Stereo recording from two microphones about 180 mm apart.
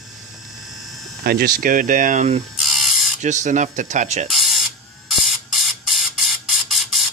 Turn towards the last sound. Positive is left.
turn(degrees=0)  # may be behind; listen again after turning